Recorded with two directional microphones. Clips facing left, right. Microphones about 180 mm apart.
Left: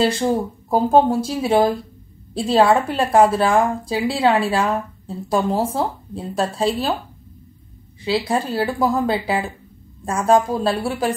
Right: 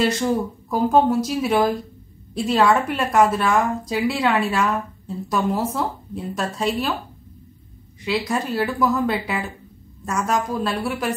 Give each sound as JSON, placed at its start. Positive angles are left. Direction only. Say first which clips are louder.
{"t": 0.0, "sound": "a woman's voice", "louder": "left 2 dB", "side_deg": 30}
{"t": 8.0, "sound": "a woman's voice", "louder": "left 3 dB", "side_deg": 30}